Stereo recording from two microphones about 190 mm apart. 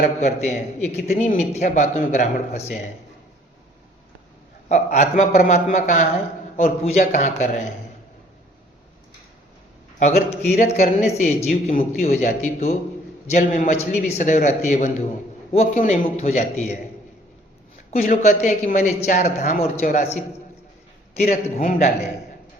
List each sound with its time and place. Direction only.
0.0 s a woman's voice: 40° left (ahead or behind)
4.7 s a woman's voice: 40° left (ahead or behind)
10.0 s a woman's voice: 35° left (ahead or behind)
17.9 s a woman's voice: 45° left (ahead or behind)
21.2 s a woman's voice: 40° left (ahead or behind)